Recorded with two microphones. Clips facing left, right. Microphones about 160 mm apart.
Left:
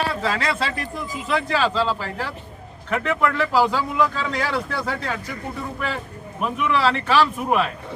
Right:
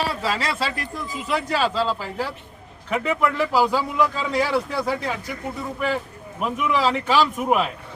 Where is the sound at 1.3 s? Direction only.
5° right (ahead or behind).